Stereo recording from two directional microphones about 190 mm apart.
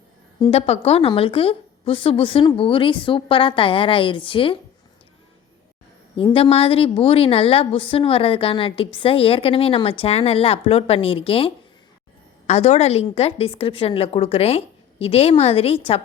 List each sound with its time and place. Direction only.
0.4 s a woman's voice: 30° left (ahead or behind)
6.1 s a woman's voice: 30° left (ahead or behind)